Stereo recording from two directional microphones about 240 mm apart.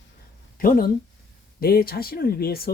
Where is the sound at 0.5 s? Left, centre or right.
Left.